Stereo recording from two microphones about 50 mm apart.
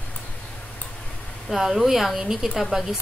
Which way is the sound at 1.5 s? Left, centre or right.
Centre.